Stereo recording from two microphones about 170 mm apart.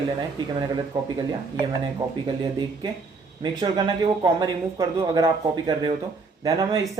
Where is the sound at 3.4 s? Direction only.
25° right (ahead or behind).